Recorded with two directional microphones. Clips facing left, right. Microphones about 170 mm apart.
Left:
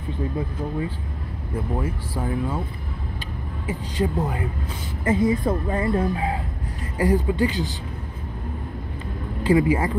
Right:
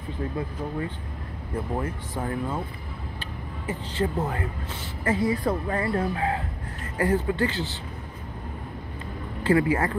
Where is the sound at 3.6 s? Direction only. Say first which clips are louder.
Left 2 dB; 10° left (ahead or behind).